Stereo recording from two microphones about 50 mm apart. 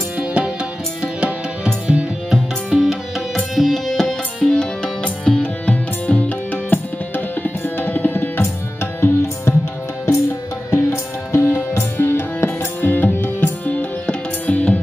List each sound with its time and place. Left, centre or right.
0.2 s music: right
2.3 s music: centre
5.0 s music: left
10.7 s music: left
12.8 s music: left
13.7 s music: left